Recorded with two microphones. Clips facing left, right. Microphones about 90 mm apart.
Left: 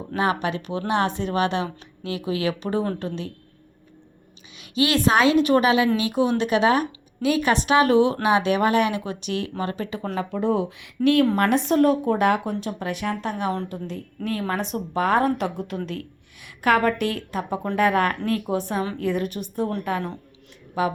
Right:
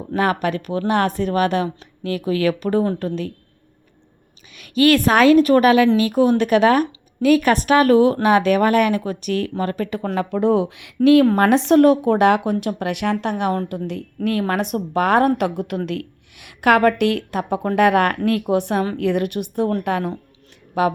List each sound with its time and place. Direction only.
0.2 s speech: 55° right (ahead or behind)
4.5 s a woman's voice: 55° right (ahead or behind); by 15.8 s 70° right (ahead or behind)
15.9 s a woman's voice: 85° right; by 19.7 s 65° right (ahead or behind)
19.9 s a woman's voice: 80° right
20.8 s speech: 70° right (ahead or behind)